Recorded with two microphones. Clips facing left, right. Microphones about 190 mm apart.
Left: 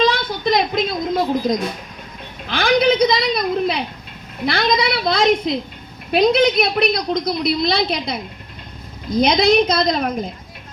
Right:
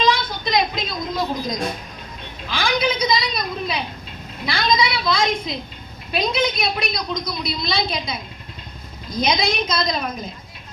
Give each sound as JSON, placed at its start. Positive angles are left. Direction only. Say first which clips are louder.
{"t": 0.0, "sound": "music", "louder": "left 3 dB", "side_deg": 55}
{"t": 2.5, "sound": "a woman's voice", "louder": "left 6 dB", "side_deg": 60}